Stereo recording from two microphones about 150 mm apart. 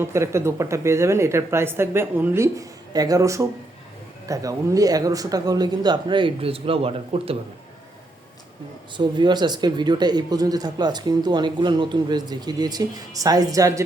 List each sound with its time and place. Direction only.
0.0 s speech: 20° right (ahead or behind); by 7.3 s 40° right (ahead or behind)
9.0 s speech: 30° right (ahead or behind)